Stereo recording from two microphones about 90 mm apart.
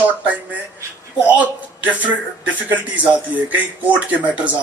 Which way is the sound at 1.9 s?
20° right (ahead or behind).